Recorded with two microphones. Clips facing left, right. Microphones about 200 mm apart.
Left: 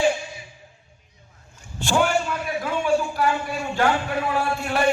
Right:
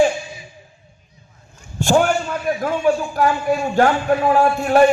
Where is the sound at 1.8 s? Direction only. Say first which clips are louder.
Right 5 dB; 45° right (ahead or behind).